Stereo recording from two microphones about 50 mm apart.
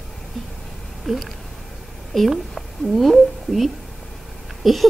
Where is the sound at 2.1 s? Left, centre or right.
Centre.